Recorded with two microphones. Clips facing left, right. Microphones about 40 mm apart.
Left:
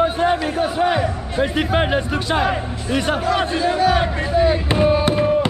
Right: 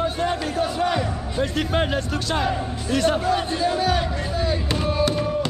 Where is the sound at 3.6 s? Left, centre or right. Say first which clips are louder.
Left 5 dB; centre.